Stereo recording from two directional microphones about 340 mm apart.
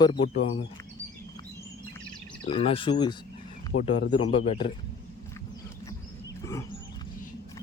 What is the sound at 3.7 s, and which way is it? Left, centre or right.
Speech, left.